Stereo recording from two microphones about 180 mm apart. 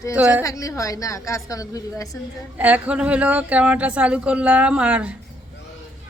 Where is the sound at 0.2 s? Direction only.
10° right (ahead or behind).